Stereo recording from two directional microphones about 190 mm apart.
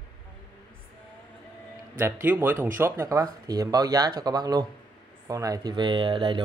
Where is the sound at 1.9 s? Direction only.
10° right (ahead or behind).